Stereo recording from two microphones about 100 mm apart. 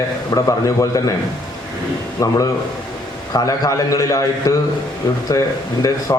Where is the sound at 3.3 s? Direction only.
35° left (ahead or behind).